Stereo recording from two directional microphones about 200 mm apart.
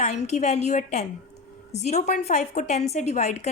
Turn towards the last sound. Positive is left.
turn(degrees=35)  # may be behind; listen again after turning